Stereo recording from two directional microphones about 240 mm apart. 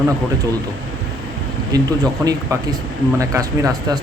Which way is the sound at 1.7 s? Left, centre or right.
Centre.